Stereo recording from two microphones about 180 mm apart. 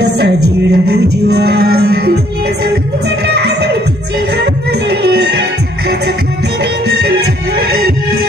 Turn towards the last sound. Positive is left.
turn(degrees=-65)  # may be behind; listen again after turning